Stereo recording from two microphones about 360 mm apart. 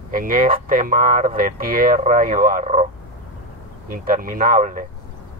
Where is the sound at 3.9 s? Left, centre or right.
Right.